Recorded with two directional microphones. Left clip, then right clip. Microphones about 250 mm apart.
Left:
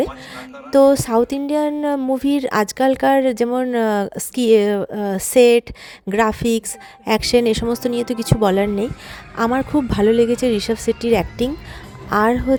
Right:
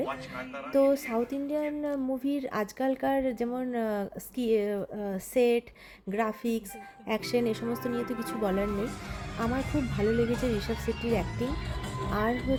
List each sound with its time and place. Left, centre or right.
0.0 s speech: left